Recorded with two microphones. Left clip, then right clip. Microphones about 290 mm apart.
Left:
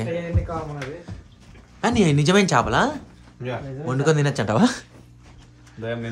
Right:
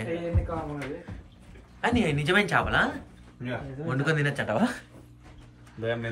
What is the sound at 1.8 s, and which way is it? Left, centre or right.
Speech, left.